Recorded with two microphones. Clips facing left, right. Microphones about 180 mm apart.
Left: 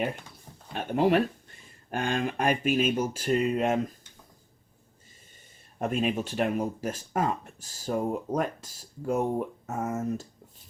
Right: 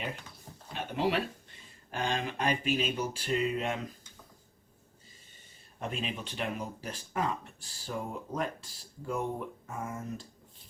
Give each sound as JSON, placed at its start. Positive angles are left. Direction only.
{"t": 0.7, "sound": "speech", "side_deg": 50}
{"t": 5.8, "sound": "speech", "side_deg": 50}